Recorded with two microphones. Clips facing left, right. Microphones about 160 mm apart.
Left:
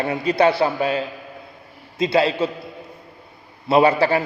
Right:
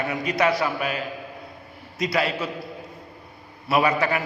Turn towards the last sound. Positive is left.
turn(degrees=30)  # may be behind; listen again after turning